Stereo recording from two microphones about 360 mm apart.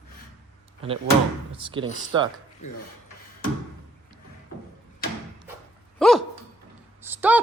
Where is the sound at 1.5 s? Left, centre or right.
Centre.